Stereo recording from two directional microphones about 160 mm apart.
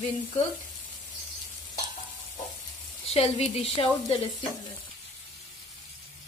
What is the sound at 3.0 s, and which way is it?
Sizzle, 40° left (ahead or behind).